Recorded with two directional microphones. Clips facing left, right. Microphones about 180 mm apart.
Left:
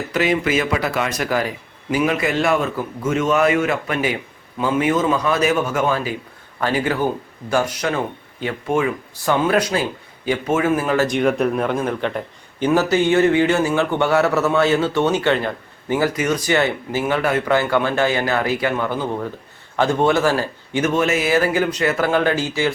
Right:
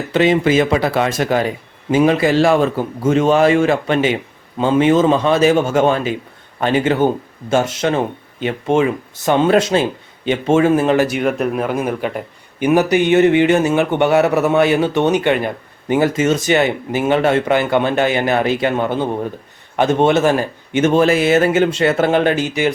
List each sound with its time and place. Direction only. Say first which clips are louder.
0.1 s speech: right 6 dB; 25° right (ahead or behind)
11.0 s speech: even; 5° right (ahead or behind)